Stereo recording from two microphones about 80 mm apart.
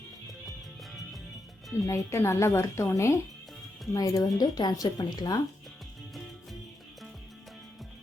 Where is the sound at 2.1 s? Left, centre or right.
Left.